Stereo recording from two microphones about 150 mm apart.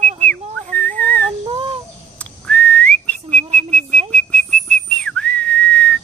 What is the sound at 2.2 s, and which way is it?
Whistling, 10° left (ahead or behind).